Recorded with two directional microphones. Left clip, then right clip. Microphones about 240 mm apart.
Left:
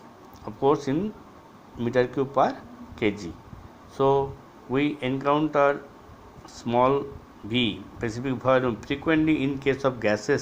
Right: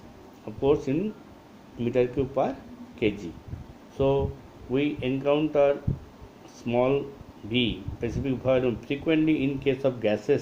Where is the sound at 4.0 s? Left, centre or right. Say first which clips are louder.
Left 3 dB; left.